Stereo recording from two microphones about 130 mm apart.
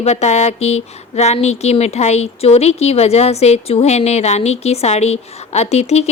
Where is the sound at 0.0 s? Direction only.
60° left (ahead or behind).